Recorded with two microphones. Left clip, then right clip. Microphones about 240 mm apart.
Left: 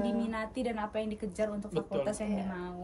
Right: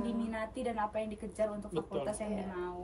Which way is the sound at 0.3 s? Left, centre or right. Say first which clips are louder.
Left 2 dB; left.